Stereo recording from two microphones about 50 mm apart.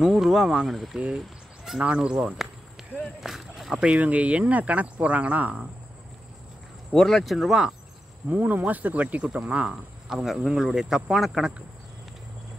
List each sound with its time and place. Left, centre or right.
0.0 s speech: centre
1.8 s speech: centre
3.0 s whip: centre
4.0 s speech: right
6.9 s speech: centre
8.3 s speech: right
10.0 s speech: centre